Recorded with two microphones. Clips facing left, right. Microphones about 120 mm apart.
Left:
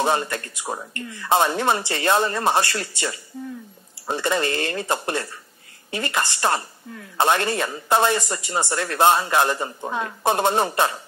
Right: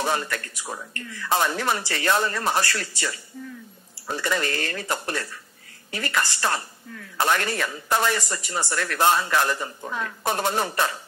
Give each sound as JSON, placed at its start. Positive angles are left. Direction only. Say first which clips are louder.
{"t": 0.0, "sound": "a man's voice", "louder": "left 4 dB", "side_deg": 25}